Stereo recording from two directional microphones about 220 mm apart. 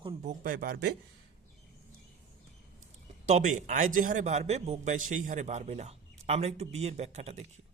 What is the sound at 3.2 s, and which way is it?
A man's voice, 35° right (ahead or behind).